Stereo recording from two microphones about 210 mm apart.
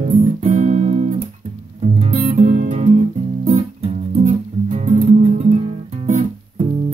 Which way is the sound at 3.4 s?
30° right (ahead or behind).